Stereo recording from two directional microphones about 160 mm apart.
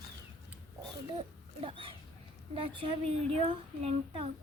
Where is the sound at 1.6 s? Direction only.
35° right (ahead or behind).